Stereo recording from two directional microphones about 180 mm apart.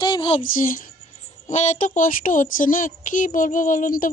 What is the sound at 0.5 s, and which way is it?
A woman's voice, 50° left (ahead or behind).